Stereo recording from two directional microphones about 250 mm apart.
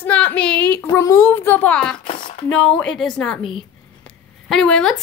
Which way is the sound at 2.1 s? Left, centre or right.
Left.